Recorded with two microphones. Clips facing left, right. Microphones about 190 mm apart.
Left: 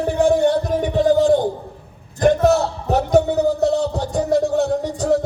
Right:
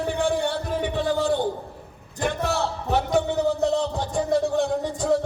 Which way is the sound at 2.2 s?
40° left (ahead or behind).